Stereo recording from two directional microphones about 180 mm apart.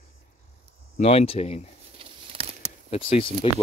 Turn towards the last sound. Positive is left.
turn(degrees=30)  # may be behind; listen again after turning